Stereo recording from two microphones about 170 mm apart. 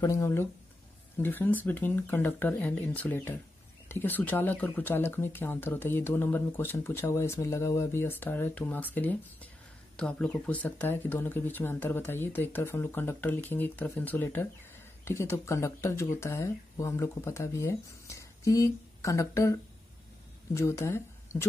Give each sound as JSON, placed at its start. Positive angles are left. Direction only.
{"t": 0.0, "sound": "speech", "side_deg": 15}